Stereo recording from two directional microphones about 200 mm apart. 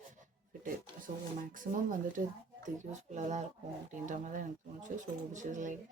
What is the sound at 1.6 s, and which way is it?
Speech, 40° right (ahead or behind).